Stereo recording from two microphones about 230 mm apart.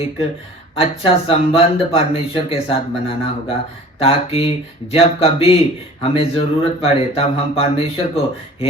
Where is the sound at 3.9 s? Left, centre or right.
Left.